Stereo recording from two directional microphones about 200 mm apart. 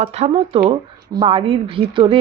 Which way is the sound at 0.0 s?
30° right (ahead or behind).